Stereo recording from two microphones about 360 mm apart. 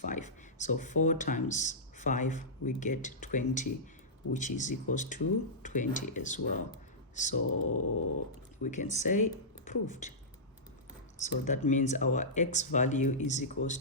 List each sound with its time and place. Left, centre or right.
0.0 s speech: left
7.6 s a sound: left
8.6 s speech: left
11.2 s speech: centre